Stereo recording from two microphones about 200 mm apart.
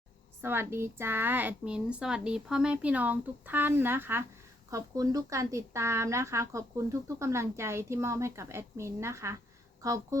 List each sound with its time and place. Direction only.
0.4 s speech: 10° right (ahead or behind)